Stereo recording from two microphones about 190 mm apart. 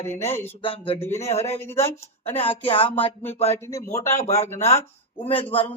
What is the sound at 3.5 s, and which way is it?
Speech, 15° left (ahead or behind).